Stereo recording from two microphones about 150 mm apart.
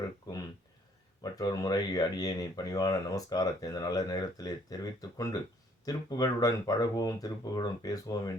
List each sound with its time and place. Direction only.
1.2 s speech: 25° left (ahead or behind)